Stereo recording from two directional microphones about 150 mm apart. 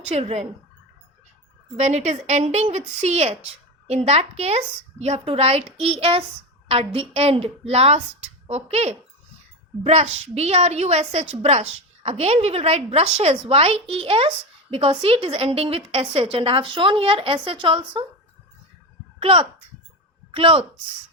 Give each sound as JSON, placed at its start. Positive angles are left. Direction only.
{"t": 0.1, "sound": "a woman's voice", "side_deg": -45}
{"t": 1.7, "sound": "a woman's voice", "side_deg": -50}
{"t": 19.2, "sound": "a woman's voice", "side_deg": -40}